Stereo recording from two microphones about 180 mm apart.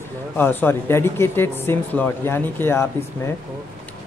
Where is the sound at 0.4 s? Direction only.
10° left (ahead or behind).